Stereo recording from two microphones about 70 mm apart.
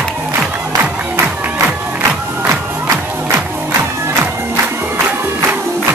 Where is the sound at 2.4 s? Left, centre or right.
Right.